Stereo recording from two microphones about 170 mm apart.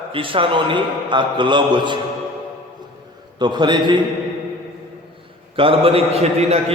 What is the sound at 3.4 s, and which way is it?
Speech, 25° right (ahead or behind).